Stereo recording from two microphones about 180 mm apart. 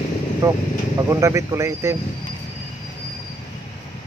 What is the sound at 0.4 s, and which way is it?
Speech, 15° right (ahead or behind).